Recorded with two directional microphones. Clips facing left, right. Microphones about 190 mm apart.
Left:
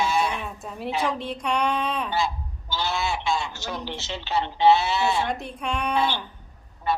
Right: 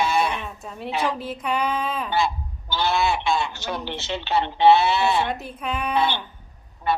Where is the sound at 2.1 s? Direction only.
60° right (ahead or behind).